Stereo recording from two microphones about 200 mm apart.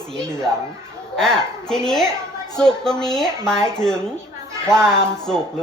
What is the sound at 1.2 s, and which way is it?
Speech, 5° left (ahead or behind).